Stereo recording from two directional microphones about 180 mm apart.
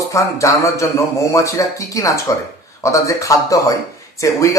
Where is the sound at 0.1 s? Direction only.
15° left (ahead or behind).